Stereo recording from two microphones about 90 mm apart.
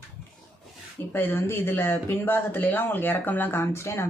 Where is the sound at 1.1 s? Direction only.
25° left (ahead or behind).